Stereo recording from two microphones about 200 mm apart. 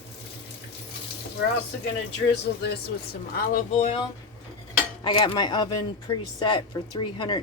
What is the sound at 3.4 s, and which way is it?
Speech, 40° left (ahead or behind).